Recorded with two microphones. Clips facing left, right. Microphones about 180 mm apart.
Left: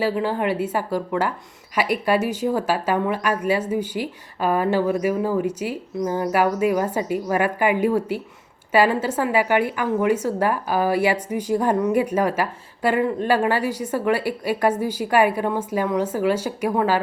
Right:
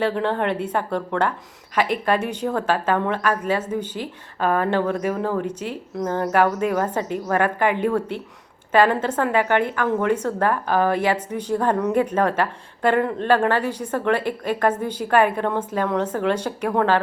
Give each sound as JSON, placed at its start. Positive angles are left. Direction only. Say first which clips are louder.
{"t": 0.0, "sound": "a woman's voice", "louder": "even", "side_deg": 5}